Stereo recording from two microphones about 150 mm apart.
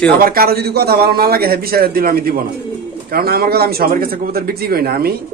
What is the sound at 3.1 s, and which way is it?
Speech, 90° right.